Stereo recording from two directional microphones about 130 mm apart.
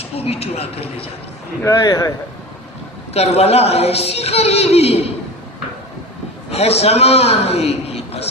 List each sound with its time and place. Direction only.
0.0 s a man's voice: 50° left (ahead or behind)
1.6 s a man's voice: 25° left (ahead or behind)
3.1 s a man's voice: 55° left (ahead or behind)
6.5 s a man's voice: 50° left (ahead or behind)